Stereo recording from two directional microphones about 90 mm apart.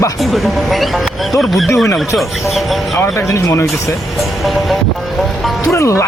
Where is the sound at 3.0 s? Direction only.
30° left (ahead or behind).